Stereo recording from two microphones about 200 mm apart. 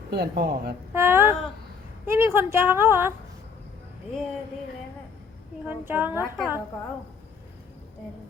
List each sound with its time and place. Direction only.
0.1 s speech: 50° right (ahead or behind)
0.9 s a woman's voice: 10° right (ahead or behind)
5.6 s a woman's voice: 10° right (ahead or behind)